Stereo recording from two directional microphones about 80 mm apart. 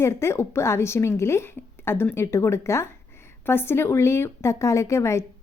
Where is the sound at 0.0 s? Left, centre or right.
Left.